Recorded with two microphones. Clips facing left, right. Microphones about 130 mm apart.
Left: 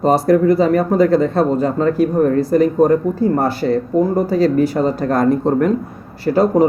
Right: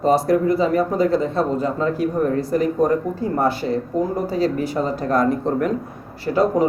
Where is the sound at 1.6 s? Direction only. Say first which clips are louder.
Left 5 dB; 50° left (ahead or behind).